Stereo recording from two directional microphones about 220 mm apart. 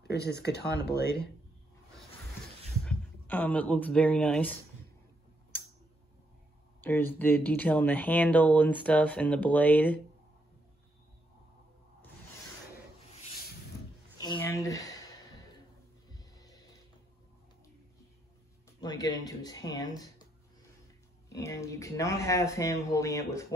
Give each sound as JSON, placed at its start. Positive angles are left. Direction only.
{"t": 0.0, "sound": "speech", "side_deg": 50}
{"t": 2.8, "sound": "speech", "side_deg": 5}
{"t": 6.8, "sound": "speech", "side_deg": 10}
{"t": 14.2, "sound": "a sound", "side_deg": 15}
{"t": 16.1, "sound": "music", "side_deg": 15}
{"t": 18.8, "sound": "speech", "side_deg": 20}
{"t": 21.3, "sound": "speech", "side_deg": 15}